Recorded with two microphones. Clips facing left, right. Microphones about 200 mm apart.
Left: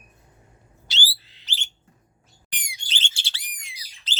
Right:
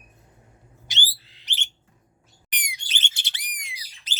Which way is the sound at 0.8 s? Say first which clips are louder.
Left 2 dB; 15° right (ahead or behind).